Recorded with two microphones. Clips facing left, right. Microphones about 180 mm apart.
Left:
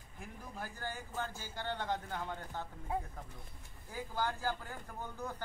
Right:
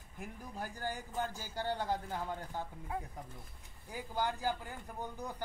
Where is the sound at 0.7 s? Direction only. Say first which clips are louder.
Right 3 dB; 15° right (ahead or behind).